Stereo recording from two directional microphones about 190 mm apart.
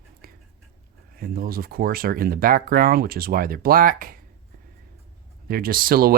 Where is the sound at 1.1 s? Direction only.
50° right (ahead or behind).